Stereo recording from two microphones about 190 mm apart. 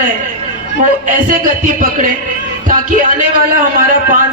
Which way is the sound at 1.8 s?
45° right (ahead or behind).